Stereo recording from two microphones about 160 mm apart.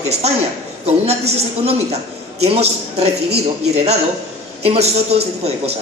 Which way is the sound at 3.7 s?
40° right (ahead or behind).